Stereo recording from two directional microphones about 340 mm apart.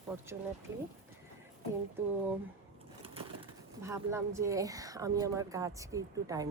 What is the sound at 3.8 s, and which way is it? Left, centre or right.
Speech, centre.